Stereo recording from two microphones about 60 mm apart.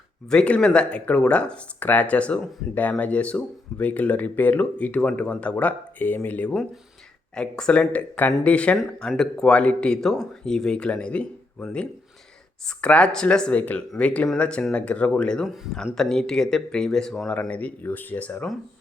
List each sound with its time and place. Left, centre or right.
0.3 s speech: centre
7.3 s speech: centre
9.0 s speech: centre
15.4 s speech: centre
16.0 s speech: centre
17.5 s speech: left